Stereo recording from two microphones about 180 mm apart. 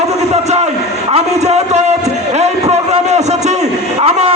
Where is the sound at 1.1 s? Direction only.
35° right (ahead or behind).